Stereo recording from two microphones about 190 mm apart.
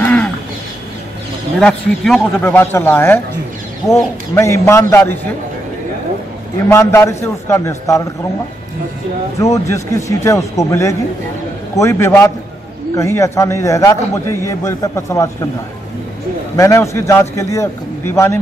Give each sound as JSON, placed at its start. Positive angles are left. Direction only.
{"t": 0.0, "sound": "a sound", "side_deg": 10}
{"t": 1.6, "sound": "a man's voice", "side_deg": 0}
{"t": 6.7, "sound": "a man's voice", "side_deg": 15}
{"t": 9.7, "sound": "a man's voice", "side_deg": 15}
{"t": 16.5, "sound": "a man's voice", "side_deg": 15}